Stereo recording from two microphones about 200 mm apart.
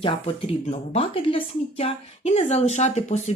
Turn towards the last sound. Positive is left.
turn(degrees=35)  # may be behind; listen again after turning